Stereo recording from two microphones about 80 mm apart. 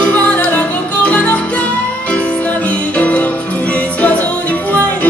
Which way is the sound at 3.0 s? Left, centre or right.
Centre.